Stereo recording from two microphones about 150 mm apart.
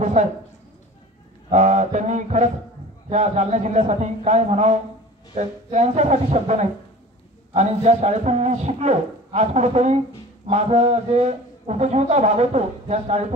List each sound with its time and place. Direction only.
0.0 s speech: 50° right (ahead or behind)
1.5 s a man's voice: 50° right (ahead or behind)